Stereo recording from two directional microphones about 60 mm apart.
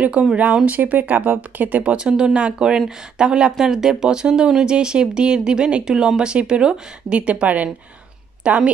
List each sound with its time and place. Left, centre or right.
0.0 s speech: centre